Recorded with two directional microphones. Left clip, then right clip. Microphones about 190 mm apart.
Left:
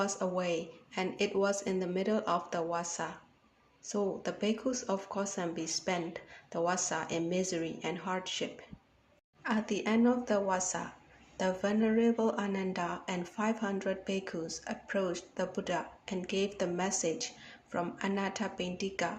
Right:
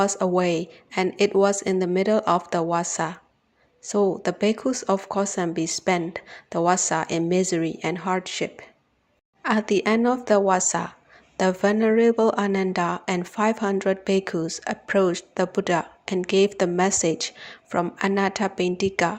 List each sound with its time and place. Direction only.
0.0 s speech: 45° right (ahead or behind)